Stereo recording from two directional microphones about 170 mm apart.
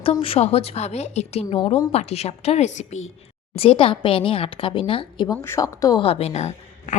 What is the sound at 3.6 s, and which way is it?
A woman's voice, 30° left (ahead or behind).